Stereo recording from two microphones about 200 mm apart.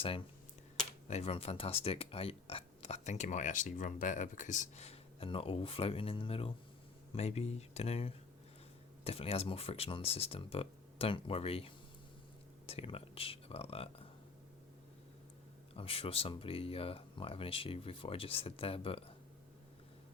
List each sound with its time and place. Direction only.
0.0 s speech: 25° left (ahead or behind)
15.7 s speech: 30° left (ahead or behind)